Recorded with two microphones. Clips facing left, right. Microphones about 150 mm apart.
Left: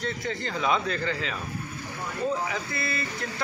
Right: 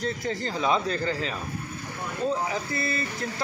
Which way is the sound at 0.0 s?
35° right (ahead or behind).